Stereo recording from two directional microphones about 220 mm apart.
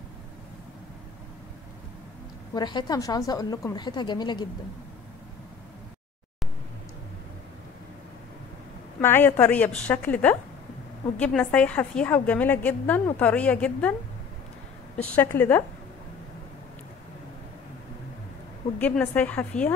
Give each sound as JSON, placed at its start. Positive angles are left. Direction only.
{"t": 2.5, "sound": "a woman's voice", "side_deg": 20}
{"t": 9.0, "sound": "a woman's voice", "side_deg": 10}
{"t": 15.1, "sound": "a woman's voice", "side_deg": 10}
{"t": 18.8, "sound": "a woman's voice", "side_deg": 5}